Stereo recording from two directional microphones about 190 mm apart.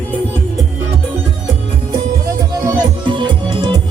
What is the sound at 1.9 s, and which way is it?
Music, 20° right (ahead or behind).